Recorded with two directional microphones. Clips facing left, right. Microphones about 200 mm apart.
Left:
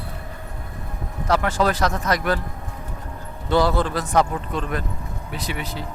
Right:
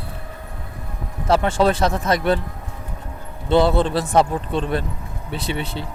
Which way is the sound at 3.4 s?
25° right (ahead or behind).